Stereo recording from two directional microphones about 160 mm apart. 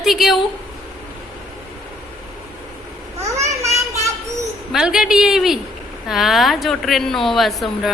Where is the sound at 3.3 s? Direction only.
20° right (ahead or behind).